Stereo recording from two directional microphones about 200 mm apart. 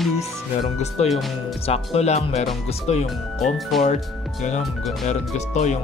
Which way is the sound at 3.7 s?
Centre (ahead or behind).